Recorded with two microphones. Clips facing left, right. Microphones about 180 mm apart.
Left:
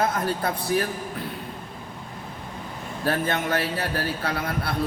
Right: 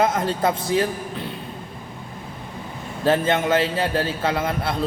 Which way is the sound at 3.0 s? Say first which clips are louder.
Right 6 dB; 20° right (ahead or behind).